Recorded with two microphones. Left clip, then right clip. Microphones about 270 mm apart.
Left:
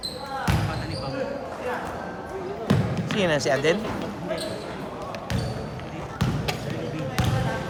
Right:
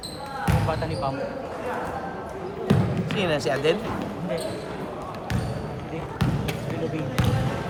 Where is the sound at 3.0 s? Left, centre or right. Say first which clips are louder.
Left 3 dB; left.